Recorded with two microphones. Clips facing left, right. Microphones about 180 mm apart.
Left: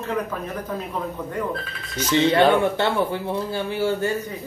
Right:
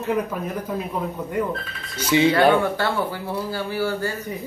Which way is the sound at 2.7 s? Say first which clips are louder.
Left 2 dB; 25° left (ahead or behind).